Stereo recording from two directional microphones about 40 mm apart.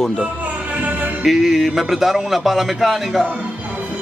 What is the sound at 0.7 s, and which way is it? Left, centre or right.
Music, right.